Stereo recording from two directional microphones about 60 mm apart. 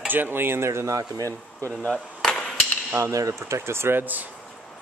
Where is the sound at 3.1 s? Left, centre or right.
Right.